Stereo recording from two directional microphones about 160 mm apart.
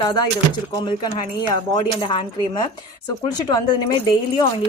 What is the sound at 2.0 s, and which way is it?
Speech, 30° left (ahead or behind).